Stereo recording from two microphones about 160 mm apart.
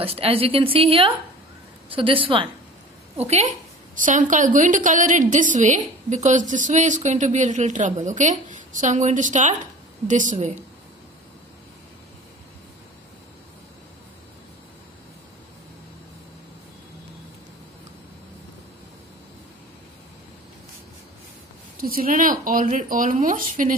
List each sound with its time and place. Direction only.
0.0 s a woman's voice: 35° right (ahead or behind)
3.2 s a woman's voice: 45° right (ahead or behind)
21.8 s speech: 65° right (ahead or behind)